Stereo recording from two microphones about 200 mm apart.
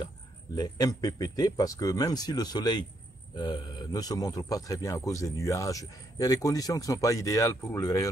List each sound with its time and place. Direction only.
0.6 s a man's voice: 20° left (ahead or behind)